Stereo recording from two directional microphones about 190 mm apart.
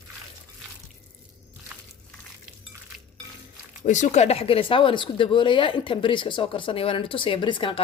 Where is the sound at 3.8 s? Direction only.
40° left (ahead or behind).